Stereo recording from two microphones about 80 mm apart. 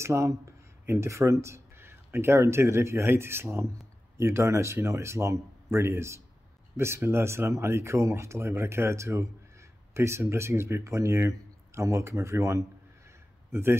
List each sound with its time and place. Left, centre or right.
0.0 s speech: right